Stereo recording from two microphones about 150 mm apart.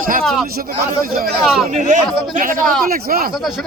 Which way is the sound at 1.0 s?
80° right.